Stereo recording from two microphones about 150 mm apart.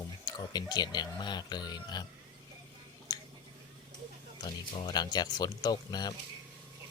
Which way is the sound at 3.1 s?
25° left (ahead or behind).